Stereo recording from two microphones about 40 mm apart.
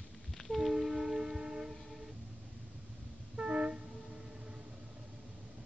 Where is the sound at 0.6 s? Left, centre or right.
Centre.